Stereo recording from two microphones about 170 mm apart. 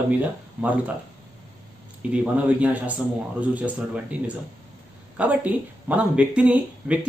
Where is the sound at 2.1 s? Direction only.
5° right (ahead or behind).